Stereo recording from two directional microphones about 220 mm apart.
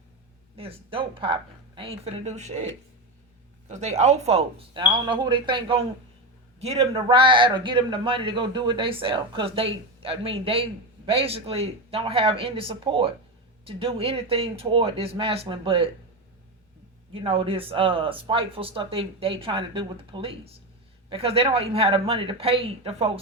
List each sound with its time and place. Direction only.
0.5 s a man's voice: 25° right (ahead or behind)
3.7 s a man's voice: 30° right (ahead or behind)
17.2 s a man's voice: 25° right (ahead or behind)